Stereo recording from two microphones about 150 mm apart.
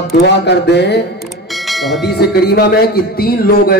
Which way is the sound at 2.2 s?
90° left.